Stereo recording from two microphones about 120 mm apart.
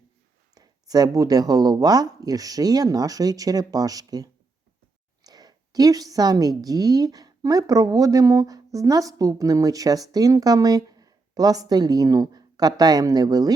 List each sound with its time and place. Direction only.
0.5 s a woman's voice: 30° right (ahead or behind)